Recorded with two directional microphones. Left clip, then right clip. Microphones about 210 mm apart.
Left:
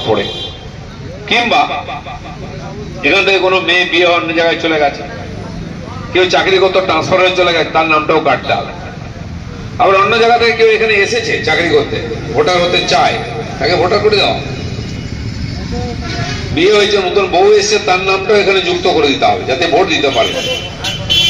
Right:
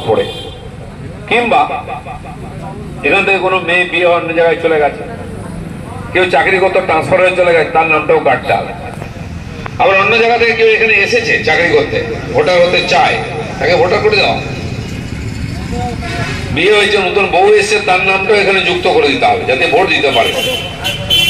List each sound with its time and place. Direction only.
3.0 s a man's voice: 55° left (ahead or behind)
6.1 s a man's voice: 55° left (ahead or behind)
9.8 s a man's voice: 55° left (ahead or behind)
16.5 s a man's voice: 50° left (ahead or behind)